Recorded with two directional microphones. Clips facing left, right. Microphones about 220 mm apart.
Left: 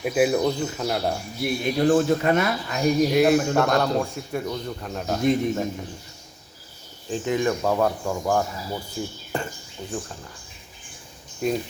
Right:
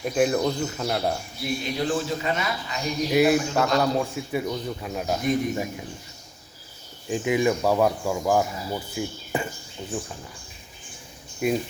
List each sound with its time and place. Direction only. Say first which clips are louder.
0.0 s speech: left 2 dB; 5° left (ahead or behind)
1.6 s speech: left 8 dB; 55° left (ahead or behind)
3.1 s speech: left 1 dB; 5° right (ahead or behind)
7.1 s speech: right 1 dB; 10° right (ahead or behind)
11.4 s speech: right 1 dB; 10° right (ahead or behind)